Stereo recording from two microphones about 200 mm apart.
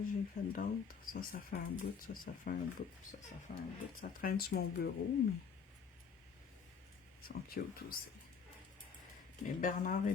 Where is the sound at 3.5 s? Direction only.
40° left (ahead or behind).